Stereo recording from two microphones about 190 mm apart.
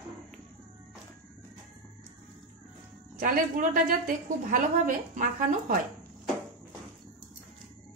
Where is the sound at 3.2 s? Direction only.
45° right (ahead or behind).